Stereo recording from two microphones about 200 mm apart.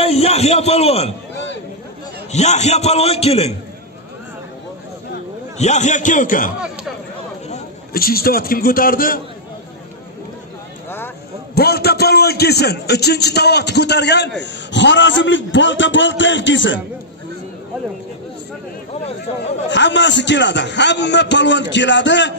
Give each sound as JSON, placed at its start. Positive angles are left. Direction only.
{"t": 0.0, "sound": "a man's voice", "side_deg": 30}
{"t": 2.3, "sound": "a man's voice", "side_deg": 35}
{"t": 5.6, "sound": "a man's voice", "side_deg": 35}
{"t": 7.9, "sound": "a man's voice", "side_deg": 50}
{"t": 11.5, "sound": "a man's voice", "side_deg": 50}
{"t": 19.7, "sound": "a man's voice", "side_deg": 65}